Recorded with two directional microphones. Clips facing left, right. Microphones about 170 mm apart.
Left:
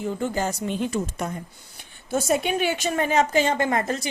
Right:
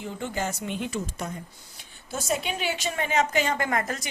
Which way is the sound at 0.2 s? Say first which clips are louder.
Left 5 dB; 35° left (ahead or behind).